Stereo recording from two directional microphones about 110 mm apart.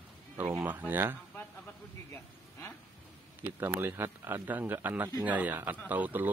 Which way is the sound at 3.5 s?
20° right (ahead or behind).